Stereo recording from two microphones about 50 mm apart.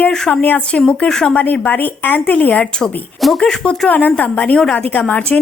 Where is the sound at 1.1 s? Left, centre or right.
Centre.